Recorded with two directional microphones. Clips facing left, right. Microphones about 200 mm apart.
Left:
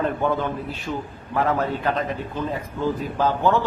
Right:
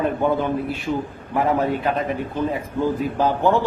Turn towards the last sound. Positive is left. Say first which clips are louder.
# right 2 dB
turn(degrees=-15)  # may be behind; listen again after turning